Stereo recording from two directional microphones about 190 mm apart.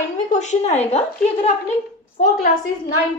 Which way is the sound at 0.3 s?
40° left (ahead or behind).